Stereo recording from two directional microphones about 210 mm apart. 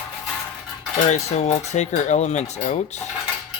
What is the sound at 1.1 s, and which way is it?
Speech, 30° left (ahead or behind).